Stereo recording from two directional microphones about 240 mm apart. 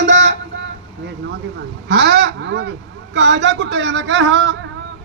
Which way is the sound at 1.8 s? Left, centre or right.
Right.